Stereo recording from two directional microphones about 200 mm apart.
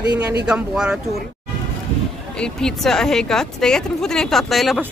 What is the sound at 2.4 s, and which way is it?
A woman's voice, 5° left (ahead or behind).